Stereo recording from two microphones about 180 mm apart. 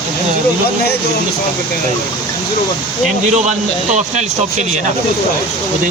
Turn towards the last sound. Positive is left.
turn(degrees=-40)  # may be behind; listen again after turning